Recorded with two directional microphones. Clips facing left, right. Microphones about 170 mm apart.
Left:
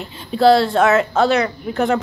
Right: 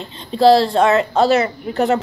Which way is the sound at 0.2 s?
5° left (ahead or behind).